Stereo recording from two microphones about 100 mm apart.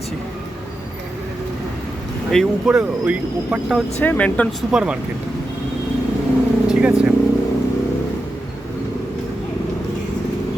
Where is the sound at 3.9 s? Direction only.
15° left (ahead or behind).